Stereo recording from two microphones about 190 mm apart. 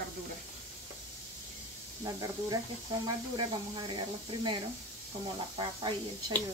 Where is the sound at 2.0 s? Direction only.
20° right (ahead or behind).